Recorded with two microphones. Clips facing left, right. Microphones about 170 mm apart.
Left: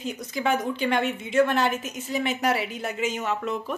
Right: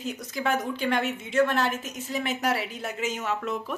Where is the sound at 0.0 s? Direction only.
Centre (ahead or behind).